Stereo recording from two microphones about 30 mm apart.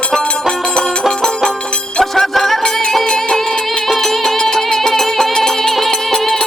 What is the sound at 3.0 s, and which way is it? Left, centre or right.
Music, left.